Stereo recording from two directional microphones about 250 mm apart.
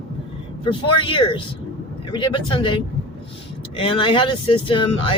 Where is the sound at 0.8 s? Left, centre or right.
Centre.